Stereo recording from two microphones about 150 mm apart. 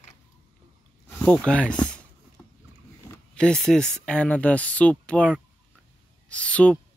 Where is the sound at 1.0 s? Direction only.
10° left (ahead or behind).